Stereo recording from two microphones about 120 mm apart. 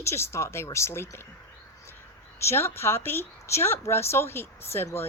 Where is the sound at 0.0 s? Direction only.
20° left (ahead or behind).